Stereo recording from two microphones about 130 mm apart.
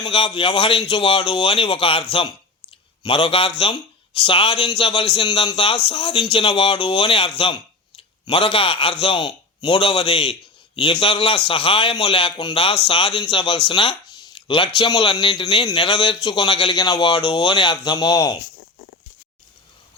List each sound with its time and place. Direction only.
0.0 s a man's voice: 40° left (ahead or behind)